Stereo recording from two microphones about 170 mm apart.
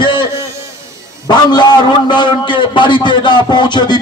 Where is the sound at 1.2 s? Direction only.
25° left (ahead or behind).